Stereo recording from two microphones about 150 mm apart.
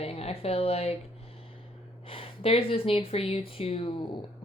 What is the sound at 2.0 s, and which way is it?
Speech, 40° left (ahead or behind).